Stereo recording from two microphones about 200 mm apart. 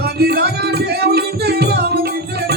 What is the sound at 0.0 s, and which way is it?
Music, 50° right (ahead or behind).